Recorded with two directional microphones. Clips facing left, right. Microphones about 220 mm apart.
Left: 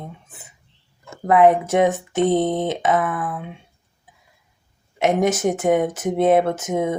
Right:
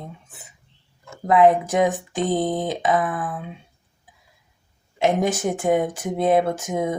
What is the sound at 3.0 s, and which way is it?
Speech, 30° right (ahead or behind).